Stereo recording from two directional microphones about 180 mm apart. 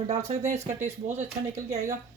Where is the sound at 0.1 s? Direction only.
40° right (ahead or behind).